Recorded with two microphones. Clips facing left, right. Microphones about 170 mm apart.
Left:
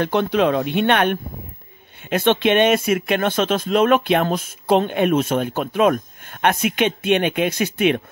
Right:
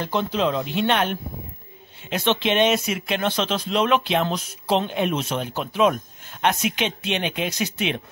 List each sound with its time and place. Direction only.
0.0 s speech: 65° left (ahead or behind)